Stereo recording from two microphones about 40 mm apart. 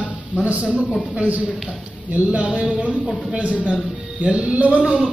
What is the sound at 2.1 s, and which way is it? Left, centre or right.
Music, right.